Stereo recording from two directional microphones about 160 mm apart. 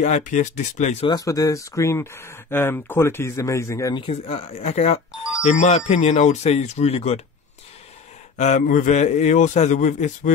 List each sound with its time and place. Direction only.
0.0 s a man's voice: 50° left (ahead or behind)
1.0 s speech: 25° left (ahead or behind)
4.0 s a man's voice: 35° left (ahead or behind)
8.4 s a man's voice: 50° left (ahead or behind)